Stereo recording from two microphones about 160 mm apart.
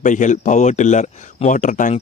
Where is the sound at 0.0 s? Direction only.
50° left (ahead or behind).